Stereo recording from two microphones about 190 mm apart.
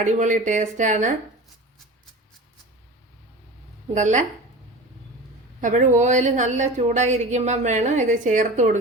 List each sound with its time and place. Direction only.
0.0 s speech: 40° right (ahead or behind)
3.9 s speech: 40° right (ahead or behind)
5.5 s speech: 40° right (ahead or behind)